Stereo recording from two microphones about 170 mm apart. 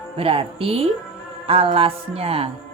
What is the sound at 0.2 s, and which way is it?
Speech, 35° right (ahead or behind).